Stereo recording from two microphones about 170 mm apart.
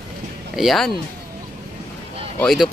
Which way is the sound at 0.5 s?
Centre (ahead or behind).